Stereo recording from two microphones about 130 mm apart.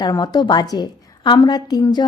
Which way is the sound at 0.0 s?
35° left (ahead or behind).